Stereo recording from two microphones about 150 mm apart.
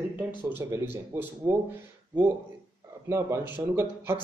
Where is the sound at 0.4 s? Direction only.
15° right (ahead or behind).